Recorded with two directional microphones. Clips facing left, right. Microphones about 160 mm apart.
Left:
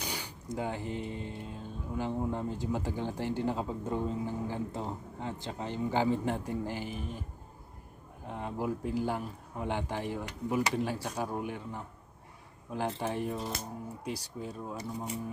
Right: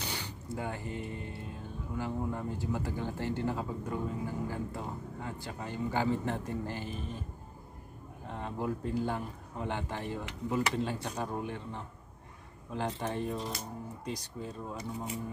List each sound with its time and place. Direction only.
0.0 s a sound: 10° left (ahead or behind)
0.5 s speech: 20° left (ahead or behind)
8.3 s a man's voice: 15° left (ahead or behind)